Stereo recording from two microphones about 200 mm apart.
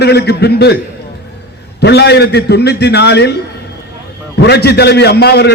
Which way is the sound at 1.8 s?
55° left (ahead or behind).